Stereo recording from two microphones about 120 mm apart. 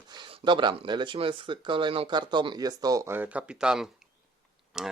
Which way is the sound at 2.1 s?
40° right (ahead or behind).